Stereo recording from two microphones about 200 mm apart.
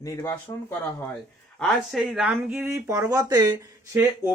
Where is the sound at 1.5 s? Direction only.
Centre (ahead or behind).